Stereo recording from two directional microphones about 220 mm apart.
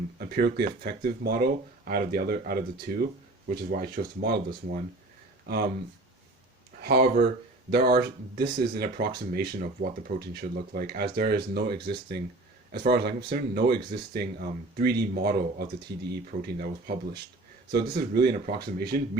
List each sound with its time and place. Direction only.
0.2 s speech: 45° right (ahead or behind)
6.8 s speech: 45° right (ahead or behind)